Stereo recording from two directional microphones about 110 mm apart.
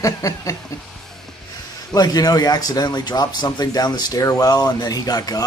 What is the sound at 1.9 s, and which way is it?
Speech, 35° left (ahead or behind).